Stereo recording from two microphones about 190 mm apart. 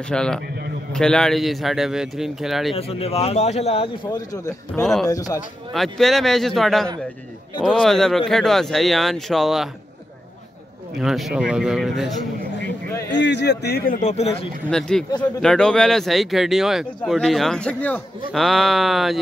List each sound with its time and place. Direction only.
0.1 s speech: 5° left (ahead or behind)
2.7 s speech: 30° left (ahead or behind)
4.8 s speech: centre (ahead or behind)
11.0 s speech: centre (ahead or behind)
12.6 s a sound: 15° left (ahead or behind)
13.1 s a man's voice: 65° left (ahead or behind); by 14.5 s 30° left (ahead or behind)
14.7 s speech: 5° left (ahead or behind)